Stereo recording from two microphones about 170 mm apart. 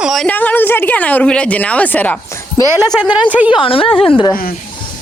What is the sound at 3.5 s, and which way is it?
Speech, 30° left (ahead or behind).